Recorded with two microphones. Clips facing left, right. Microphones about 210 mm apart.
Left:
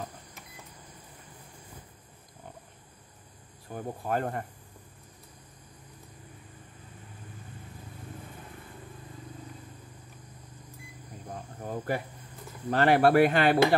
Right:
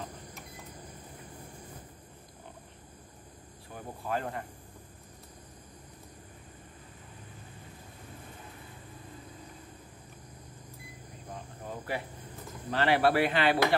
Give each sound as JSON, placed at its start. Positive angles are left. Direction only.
{"t": 3.7, "sound": "speech", "side_deg": 50}
{"t": 11.6, "sound": "speech", "side_deg": 45}